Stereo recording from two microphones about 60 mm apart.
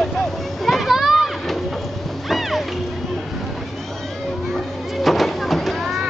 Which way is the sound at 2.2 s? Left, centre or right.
Centre.